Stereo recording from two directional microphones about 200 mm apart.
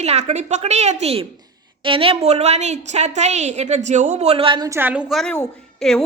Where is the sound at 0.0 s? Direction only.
30° right (ahead or behind).